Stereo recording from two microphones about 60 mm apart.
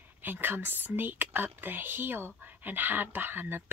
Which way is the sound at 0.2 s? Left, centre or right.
Right.